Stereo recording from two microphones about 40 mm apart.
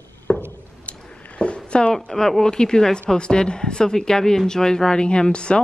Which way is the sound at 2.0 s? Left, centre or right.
Centre.